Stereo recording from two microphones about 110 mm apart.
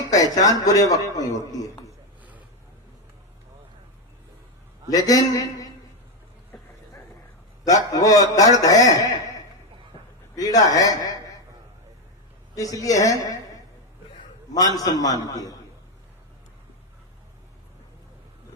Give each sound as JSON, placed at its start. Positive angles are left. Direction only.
{"t": 0.0, "sound": "a sound", "side_deg": 30}
{"t": 0.4, "sound": "a man's voice", "side_deg": 30}
{"t": 4.9, "sound": "a man's voice", "side_deg": 35}
{"t": 7.6, "sound": "a man's voice", "side_deg": 35}
{"t": 10.3, "sound": "a man's voice", "side_deg": 35}
{"t": 12.7, "sound": "a man's voice", "side_deg": 30}
{"t": 14.5, "sound": "a man's voice", "side_deg": 35}